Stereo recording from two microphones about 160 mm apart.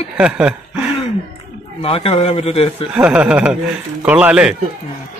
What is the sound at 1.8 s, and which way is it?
A man's voice, 35° left (ahead or behind).